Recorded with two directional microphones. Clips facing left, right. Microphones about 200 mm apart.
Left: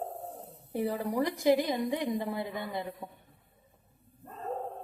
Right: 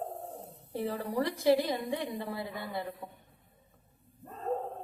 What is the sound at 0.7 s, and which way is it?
A woman's voice, 15° left (ahead or behind).